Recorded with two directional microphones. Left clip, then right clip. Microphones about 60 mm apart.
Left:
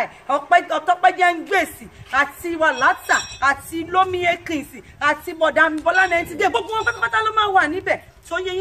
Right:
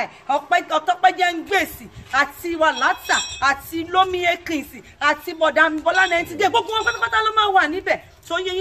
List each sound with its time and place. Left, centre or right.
0.0 s speech: left
6.7 s speech: left